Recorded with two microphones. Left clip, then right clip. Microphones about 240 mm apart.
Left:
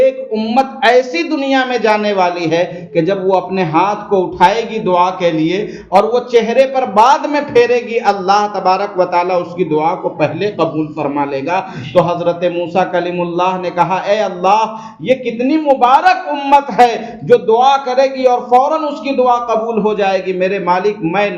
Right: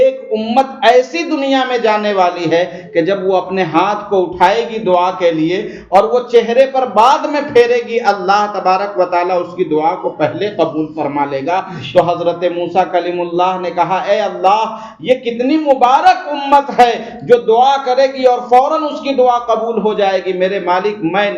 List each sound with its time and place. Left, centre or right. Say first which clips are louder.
0.0 s speech: even; centre